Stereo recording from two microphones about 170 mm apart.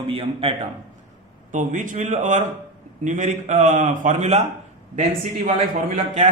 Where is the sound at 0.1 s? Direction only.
35° right (ahead or behind).